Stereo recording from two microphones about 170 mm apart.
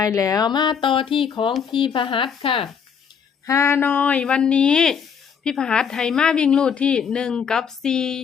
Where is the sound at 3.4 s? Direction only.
15° left (ahead or behind).